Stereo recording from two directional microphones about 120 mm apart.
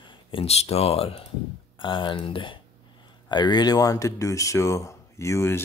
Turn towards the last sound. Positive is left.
turn(degrees=20)  # may be behind; listen again after turning